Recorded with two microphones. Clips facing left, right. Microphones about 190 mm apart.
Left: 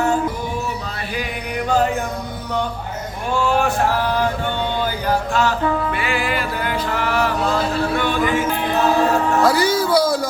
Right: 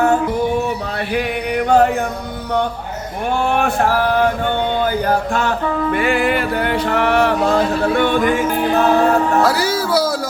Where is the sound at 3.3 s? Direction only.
60° right (ahead or behind).